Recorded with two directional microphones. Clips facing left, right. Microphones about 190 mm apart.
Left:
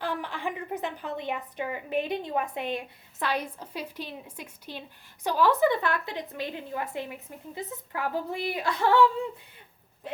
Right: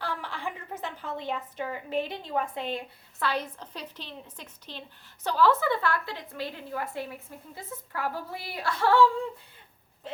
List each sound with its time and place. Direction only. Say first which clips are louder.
0.0 s a woman's voice: left 3 dB; 15° left (ahead or behind)